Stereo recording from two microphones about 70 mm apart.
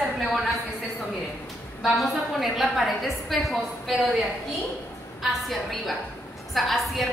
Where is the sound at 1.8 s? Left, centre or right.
Centre.